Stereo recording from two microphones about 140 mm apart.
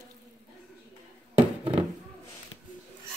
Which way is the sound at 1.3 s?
45° right (ahead or behind).